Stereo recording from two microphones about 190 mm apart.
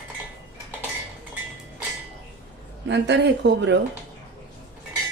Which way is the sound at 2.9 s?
70° right (ahead or behind).